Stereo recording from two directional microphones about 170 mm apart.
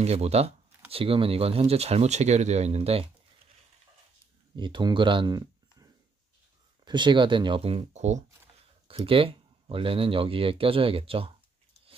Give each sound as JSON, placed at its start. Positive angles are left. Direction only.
{"t": 0.0, "sound": "speech", "side_deg": -40}
{"t": 4.6, "sound": "speech", "side_deg": -25}